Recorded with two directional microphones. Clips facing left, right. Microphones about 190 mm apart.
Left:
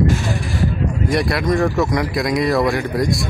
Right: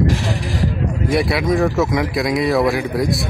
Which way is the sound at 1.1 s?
Centre (ahead or behind).